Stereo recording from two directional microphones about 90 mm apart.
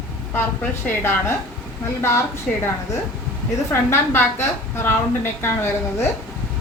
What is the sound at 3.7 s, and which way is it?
A woman's voice, 25° left (ahead or behind).